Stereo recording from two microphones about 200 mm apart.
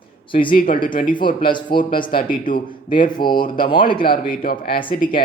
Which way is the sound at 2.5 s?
25° left (ahead or behind).